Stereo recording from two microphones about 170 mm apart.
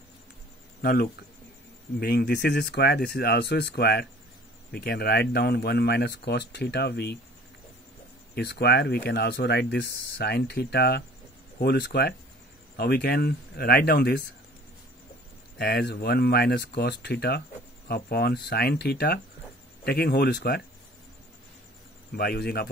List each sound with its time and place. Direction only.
2.0 s speech: 70° left (ahead or behind)
8.4 s speech: 75° left (ahead or behind)
15.5 s speech: 65° left (ahead or behind)
22.1 s a man's voice: 65° left (ahead or behind)